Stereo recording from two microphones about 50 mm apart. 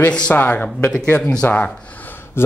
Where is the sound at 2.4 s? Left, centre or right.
Left.